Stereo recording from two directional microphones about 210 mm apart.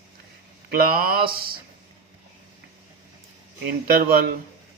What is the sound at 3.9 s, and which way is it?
Speech, 45° right (ahead or behind).